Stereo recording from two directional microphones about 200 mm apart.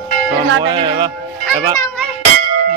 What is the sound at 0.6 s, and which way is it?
Speech, 25° right (ahead or behind).